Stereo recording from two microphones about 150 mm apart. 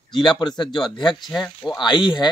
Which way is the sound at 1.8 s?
30° left (ahead or behind).